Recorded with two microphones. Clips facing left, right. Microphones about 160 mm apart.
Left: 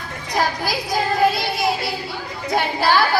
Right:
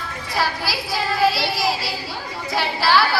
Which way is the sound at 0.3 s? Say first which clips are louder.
Left 3 dB; 45° left (ahead or behind).